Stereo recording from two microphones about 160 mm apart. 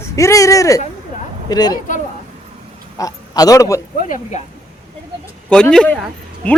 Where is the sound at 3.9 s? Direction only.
50° left (ahead or behind).